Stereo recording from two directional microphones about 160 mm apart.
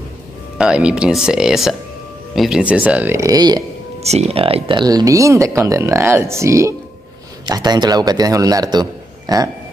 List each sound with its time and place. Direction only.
0.6 s speech: 5° right (ahead or behind); by 3.6 s 25° right (ahead or behind)
4.0 s speech: 40° right (ahead or behind); by 9.4 s 25° right (ahead or behind)